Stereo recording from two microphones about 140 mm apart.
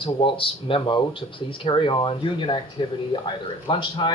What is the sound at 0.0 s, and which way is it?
Speech, 35° left (ahead or behind).